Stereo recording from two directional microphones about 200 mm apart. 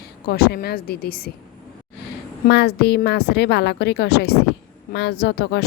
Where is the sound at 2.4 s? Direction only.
55° left (ahead or behind).